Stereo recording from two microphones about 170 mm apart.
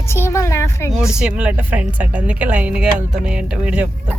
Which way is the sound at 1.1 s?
5° right (ahead or behind).